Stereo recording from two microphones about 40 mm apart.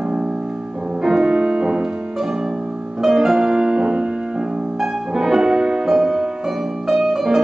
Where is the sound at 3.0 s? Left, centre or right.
Centre.